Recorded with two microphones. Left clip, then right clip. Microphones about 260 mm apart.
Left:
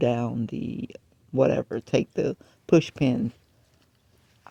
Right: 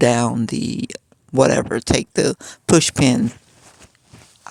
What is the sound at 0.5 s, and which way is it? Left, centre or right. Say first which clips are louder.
Speech: right 9 dB; right.